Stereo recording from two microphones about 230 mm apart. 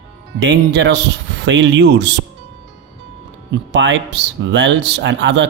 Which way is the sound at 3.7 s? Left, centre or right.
Right.